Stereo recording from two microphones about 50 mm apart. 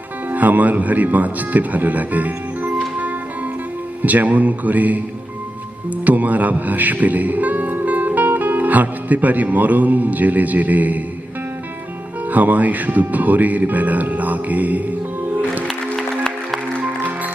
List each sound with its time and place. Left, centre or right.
0.3 s speech: right
4.0 s speech: right
6.1 s music: right
12.3 s speech: right
15.6 s music: centre